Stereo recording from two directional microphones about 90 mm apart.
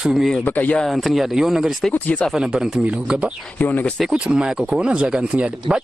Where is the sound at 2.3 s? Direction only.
5° right (ahead or behind).